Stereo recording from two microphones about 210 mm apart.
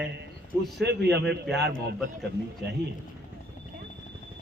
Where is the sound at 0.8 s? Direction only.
50° right (ahead or behind).